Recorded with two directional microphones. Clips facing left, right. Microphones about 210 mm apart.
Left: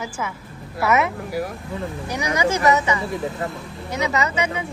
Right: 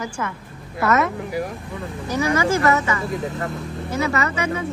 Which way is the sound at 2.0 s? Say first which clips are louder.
Right 3 dB; 15° left (ahead or behind).